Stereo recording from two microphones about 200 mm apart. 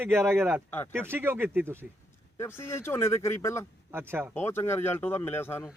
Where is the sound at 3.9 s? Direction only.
10° right (ahead or behind).